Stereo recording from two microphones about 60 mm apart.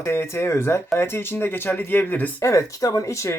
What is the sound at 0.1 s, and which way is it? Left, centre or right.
Speech, left.